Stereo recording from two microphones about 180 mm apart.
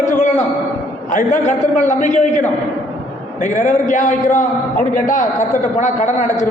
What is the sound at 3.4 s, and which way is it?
A man's voice, 45° left (ahead or behind).